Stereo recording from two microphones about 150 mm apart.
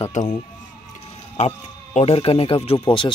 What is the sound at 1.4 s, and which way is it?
Speech, 50° left (ahead or behind).